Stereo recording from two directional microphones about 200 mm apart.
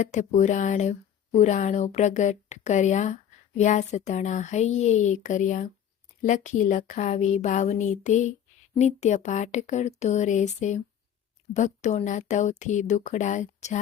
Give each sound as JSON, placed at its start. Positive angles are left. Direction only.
{"t": 0.0, "sound": "speech", "side_deg": 35}